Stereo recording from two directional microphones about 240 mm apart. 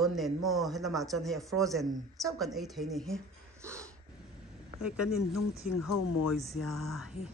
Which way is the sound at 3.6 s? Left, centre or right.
Centre.